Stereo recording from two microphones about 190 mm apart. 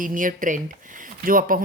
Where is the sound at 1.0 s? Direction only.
45° right (ahead or behind).